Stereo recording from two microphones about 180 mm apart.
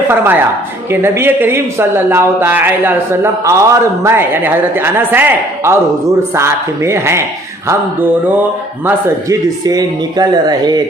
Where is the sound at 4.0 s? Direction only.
15° right (ahead or behind).